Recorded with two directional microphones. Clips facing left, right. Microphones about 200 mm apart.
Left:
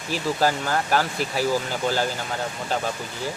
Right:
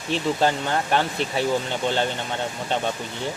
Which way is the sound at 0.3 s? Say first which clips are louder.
Right 1 dB; 25° right (ahead or behind).